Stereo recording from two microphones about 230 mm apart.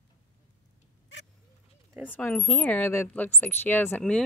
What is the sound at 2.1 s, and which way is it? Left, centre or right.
Speech, centre.